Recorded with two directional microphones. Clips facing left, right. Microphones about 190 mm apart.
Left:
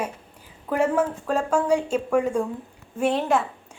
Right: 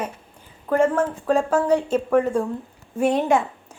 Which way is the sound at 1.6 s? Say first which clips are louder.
Right 2 dB; 10° left (ahead or behind).